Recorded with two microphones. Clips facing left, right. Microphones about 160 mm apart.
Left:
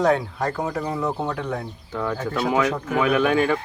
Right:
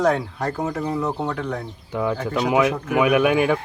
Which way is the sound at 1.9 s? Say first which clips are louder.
Right 3 dB; 10° right (ahead or behind).